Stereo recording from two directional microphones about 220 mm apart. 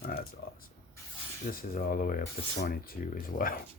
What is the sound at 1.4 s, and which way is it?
Speech, 40° left (ahead or behind).